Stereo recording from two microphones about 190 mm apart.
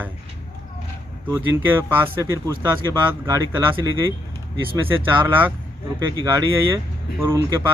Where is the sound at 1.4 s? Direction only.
10° right (ahead or behind).